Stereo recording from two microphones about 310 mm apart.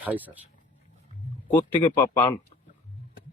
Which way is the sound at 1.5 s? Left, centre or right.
Centre.